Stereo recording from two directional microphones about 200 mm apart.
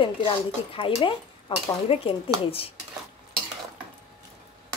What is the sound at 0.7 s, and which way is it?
Speech, 25° left (ahead or behind).